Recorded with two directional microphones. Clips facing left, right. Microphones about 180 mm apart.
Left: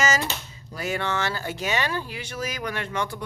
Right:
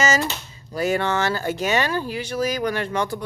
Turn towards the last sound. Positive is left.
turn(degrees=-35)  # may be behind; listen again after turning